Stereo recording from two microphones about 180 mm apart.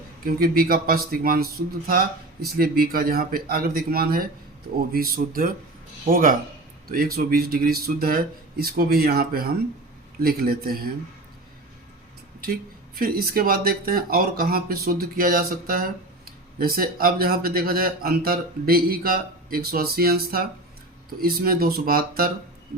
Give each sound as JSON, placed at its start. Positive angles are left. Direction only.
{"t": 0.3, "sound": "speech", "side_deg": -55}
{"t": 13.0, "sound": "speech", "side_deg": -55}